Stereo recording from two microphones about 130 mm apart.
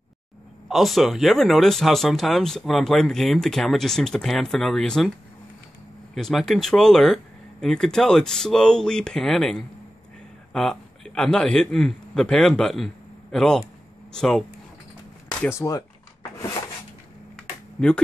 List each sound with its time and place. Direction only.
0.7 s speech: centre (ahead or behind)
6.1 s a man's voice: 5° left (ahead or behind)
15.4 s a sound: 25° left (ahead or behind)
17.4 s computer keyboard: 5° left (ahead or behind)